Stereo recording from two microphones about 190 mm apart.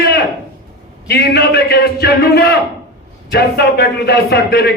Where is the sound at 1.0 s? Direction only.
60° left (ahead or behind).